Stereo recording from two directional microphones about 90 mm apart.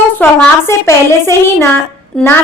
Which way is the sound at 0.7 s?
30° left (ahead or behind).